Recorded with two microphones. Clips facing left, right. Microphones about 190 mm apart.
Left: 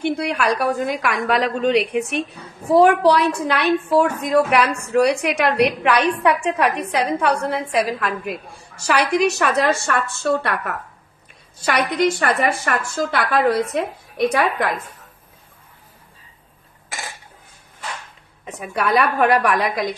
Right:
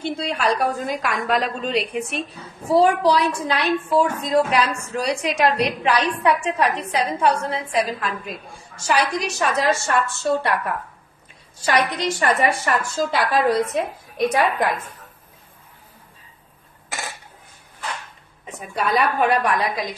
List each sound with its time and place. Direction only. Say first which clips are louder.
0.0 s a woman's voice: left 3 dB; 65° left (ahead or behind)
11.6 s a woman's voice: left 2 dB; 55° left (ahead or behind)
18.4 s a woman's voice: left 2 dB; 70° left (ahead or behind)